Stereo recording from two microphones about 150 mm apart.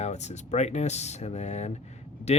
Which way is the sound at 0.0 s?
50° left (ahead or behind).